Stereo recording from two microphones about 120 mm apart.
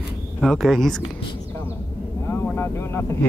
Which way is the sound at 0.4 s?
Centre (ahead or behind).